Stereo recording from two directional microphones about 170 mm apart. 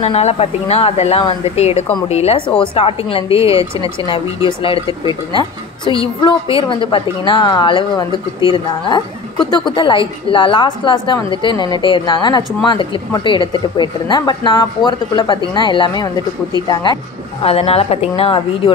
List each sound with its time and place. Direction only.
0.0 s a woman's voice: 35° left (ahead or behind)